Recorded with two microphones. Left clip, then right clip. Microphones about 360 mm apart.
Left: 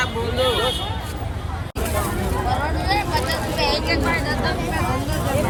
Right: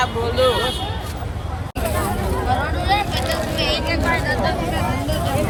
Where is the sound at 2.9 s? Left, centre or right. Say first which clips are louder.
Right 2 dB; centre.